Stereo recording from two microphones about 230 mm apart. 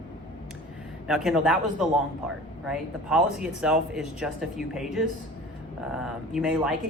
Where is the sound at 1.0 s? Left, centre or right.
Centre.